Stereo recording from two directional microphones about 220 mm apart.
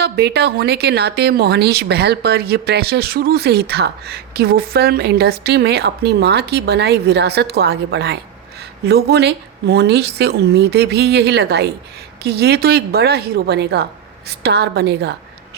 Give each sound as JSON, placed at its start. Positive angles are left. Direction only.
{"t": 0.0, "sound": "a woman's voice", "side_deg": -50}